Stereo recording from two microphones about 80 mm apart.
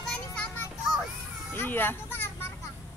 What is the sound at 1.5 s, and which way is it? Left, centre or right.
Music, left.